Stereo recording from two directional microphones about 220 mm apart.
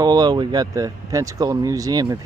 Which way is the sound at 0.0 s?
15° right (ahead or behind).